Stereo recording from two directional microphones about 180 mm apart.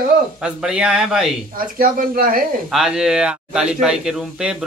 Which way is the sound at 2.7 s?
5° right (ahead or behind).